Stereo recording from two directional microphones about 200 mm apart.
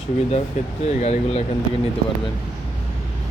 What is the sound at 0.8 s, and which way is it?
Speech, 30° left (ahead or behind).